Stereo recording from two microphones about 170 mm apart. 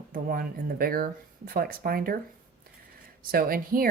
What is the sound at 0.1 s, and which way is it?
Speech, 60° right (ahead or behind).